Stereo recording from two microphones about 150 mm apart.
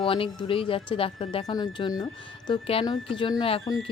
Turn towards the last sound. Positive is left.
turn(degrees=25)  # may be behind; listen again after turning